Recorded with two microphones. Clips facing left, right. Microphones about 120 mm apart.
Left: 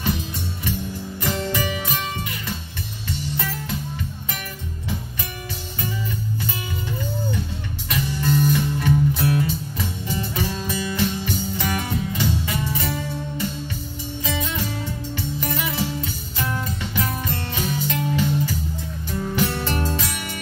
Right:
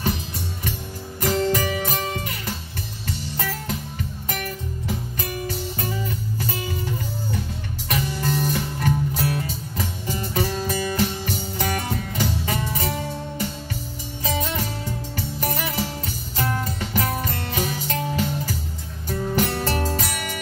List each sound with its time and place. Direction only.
1.2 s music: 40° right (ahead or behind)
3.1 s music: 45° right (ahead or behind)
5.5 s music: 40° right (ahead or behind)
7.9 s music: 40° right (ahead or behind)
14.2 s music: 40° right (ahead or behind)